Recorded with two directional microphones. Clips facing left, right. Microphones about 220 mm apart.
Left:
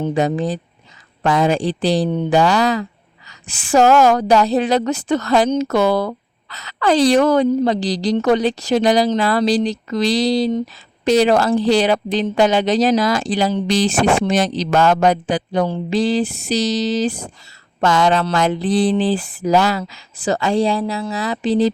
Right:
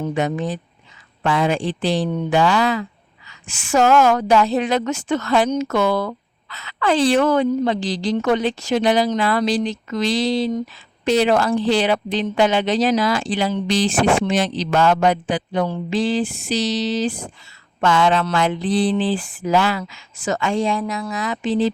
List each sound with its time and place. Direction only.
0.0 s a woman's voice: 35° left (ahead or behind)